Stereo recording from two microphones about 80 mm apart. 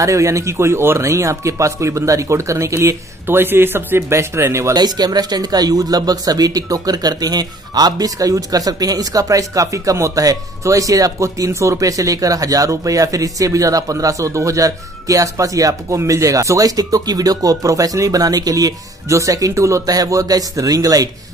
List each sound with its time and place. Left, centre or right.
0.0 s speech: right
3.3 s speech: right
4.7 s speech: right